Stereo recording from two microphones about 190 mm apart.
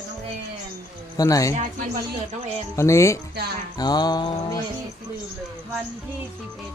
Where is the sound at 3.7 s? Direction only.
20° left (ahead or behind).